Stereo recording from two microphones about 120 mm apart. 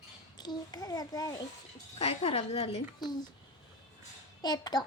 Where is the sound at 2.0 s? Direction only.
55° left (ahead or behind).